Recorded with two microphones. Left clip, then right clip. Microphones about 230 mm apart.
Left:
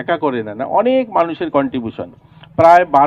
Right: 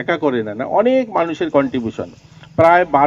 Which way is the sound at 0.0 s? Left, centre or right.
Right.